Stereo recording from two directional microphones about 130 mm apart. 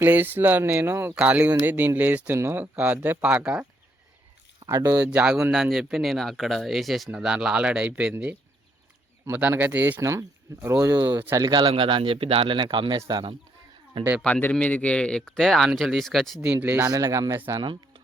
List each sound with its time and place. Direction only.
0.0 s speech: 15° right (ahead or behind)
4.6 s speech: 25° right (ahead or behind)
5.1 s speech: 5° right (ahead or behind)
11.4 s speech: 35° right (ahead or behind)
14.2 s speech: 5° left (ahead or behind)
16.4 s speech: 10° right (ahead or behind)
16.9 s speech: 25° right (ahead or behind)
17.6 s speech: 40° right (ahead or behind)